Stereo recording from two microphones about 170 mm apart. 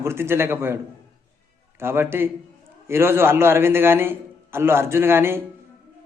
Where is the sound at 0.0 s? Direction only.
15° right (ahead or behind).